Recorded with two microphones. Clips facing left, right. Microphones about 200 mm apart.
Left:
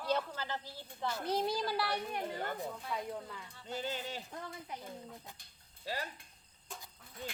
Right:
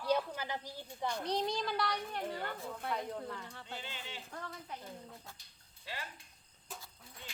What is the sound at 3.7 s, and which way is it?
Speech, 40° left (ahead or behind).